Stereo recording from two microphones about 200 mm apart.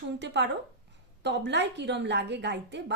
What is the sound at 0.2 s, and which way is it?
A woman's voice, 60° right (ahead or behind).